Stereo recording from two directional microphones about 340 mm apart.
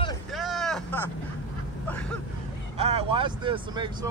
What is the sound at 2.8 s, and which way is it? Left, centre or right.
Vehicle, centre.